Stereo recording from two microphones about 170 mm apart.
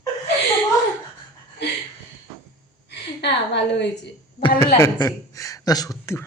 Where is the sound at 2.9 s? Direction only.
90° left.